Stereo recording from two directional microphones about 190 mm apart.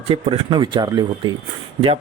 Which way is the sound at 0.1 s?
25° right (ahead or behind).